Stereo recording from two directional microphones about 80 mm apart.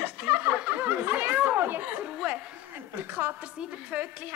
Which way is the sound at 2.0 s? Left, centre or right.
Centre.